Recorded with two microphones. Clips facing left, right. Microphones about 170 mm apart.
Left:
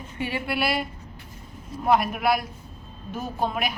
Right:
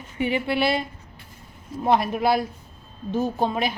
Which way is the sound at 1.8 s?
25° right (ahead or behind).